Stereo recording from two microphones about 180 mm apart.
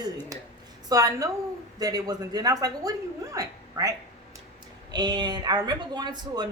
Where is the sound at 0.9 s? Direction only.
20° right (ahead or behind).